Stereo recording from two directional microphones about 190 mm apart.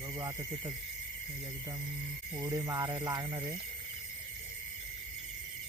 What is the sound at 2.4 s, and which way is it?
Speech, 20° right (ahead or behind).